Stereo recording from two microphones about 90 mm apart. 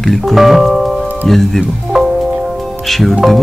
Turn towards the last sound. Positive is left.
turn(degrees=0)  # may be behind; listen again after turning